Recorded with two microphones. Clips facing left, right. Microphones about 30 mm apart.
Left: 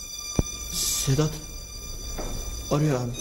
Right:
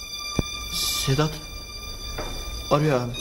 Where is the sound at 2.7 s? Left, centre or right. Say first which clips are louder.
Right 4 dB; right.